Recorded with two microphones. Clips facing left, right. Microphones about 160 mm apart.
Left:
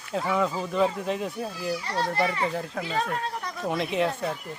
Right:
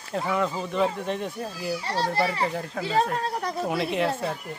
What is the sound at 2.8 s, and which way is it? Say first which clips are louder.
Speech: right 7 dB; 35° right (ahead or behind).